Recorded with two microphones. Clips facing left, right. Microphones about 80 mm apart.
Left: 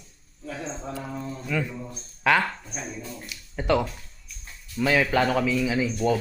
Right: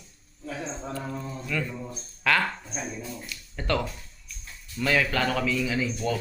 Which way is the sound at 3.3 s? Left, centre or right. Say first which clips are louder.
Left 5 dB; centre.